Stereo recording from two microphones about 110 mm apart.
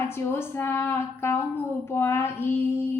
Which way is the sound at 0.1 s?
20° left (ahead or behind).